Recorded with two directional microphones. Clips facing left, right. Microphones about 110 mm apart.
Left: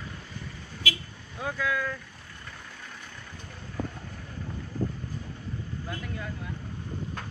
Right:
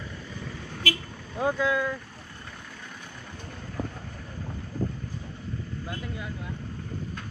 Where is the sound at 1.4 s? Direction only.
25° right (ahead or behind).